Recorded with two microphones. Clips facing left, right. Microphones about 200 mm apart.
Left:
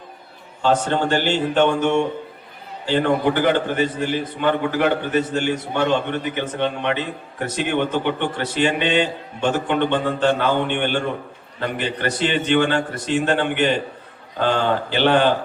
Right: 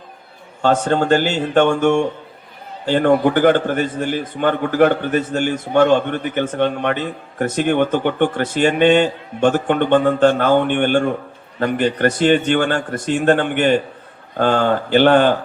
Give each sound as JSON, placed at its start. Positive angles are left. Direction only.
{"t": 0.6, "sound": "a man's voice", "side_deg": -45}